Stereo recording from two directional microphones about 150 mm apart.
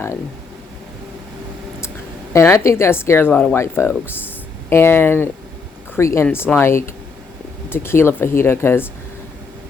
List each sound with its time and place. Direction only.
2.3 s speech: 20° left (ahead or behind)